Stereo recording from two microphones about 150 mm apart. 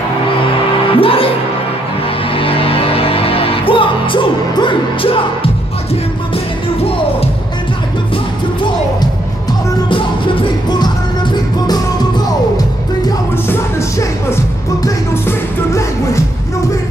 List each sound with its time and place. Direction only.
0.9 s music: 40° left (ahead or behind)
2.3 s music: 40° left (ahead or behind)
9.8 s music: 35° left (ahead or behind)
13.5 s music: 15° left (ahead or behind)